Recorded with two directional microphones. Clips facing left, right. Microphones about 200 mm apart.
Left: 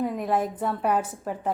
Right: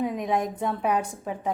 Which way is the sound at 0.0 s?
Centre (ahead or behind).